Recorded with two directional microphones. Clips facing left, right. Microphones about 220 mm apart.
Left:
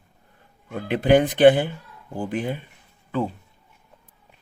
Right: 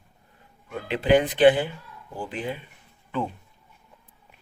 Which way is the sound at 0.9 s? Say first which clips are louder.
Left 3 dB; 45° left (ahead or behind).